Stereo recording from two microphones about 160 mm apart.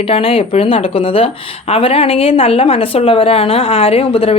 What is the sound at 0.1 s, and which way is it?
A woman's voice, 35° left (ahead or behind).